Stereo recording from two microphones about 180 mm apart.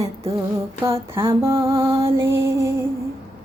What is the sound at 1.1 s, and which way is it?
Music, 15° right (ahead or behind).